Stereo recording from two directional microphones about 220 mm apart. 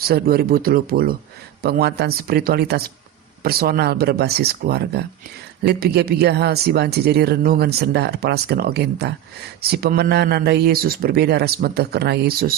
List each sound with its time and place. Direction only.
0.1 s speech: 45° right (ahead or behind)